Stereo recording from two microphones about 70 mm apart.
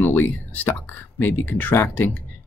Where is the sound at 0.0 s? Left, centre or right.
Left.